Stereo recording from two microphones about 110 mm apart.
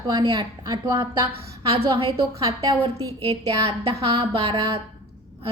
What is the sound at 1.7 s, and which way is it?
Speech, 55° right (ahead or behind).